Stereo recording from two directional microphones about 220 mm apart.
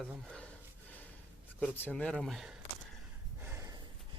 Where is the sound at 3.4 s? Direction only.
10° right (ahead or behind).